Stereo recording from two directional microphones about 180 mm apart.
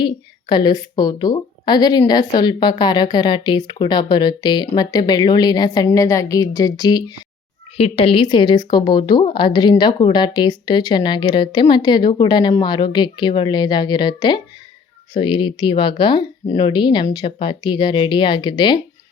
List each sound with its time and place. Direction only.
0.0 s a woman's voice: 25° left (ahead or behind)
7.8 s a woman's voice: 30° left (ahead or behind)